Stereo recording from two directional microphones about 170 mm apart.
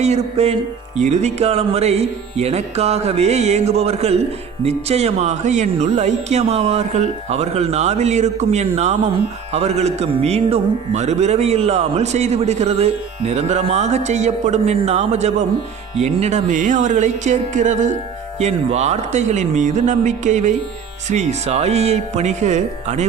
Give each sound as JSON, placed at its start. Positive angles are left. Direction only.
{"t": 0.0, "sound": "speech", "side_deg": -40}